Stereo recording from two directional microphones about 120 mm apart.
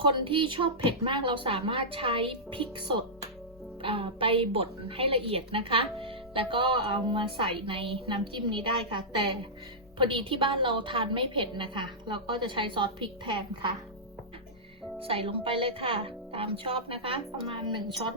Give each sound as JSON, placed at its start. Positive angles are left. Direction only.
{"t": 0.0, "sound": "a woman's voice", "side_deg": -45}
{"t": 15.0, "sound": "a woman's voice", "side_deg": -50}